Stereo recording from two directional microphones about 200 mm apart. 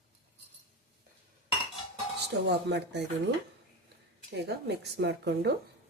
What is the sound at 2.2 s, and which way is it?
Speech, 60° right (ahead or behind).